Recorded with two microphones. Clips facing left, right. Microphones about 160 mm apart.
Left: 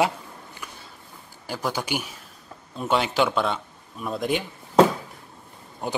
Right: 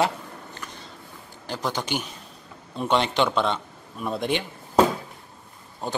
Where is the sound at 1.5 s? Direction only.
10° left (ahead or behind).